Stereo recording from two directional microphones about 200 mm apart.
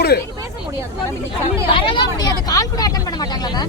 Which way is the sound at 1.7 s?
25° left (ahead or behind).